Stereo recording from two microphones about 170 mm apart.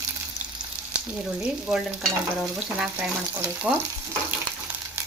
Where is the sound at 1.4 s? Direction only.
5° right (ahead or behind).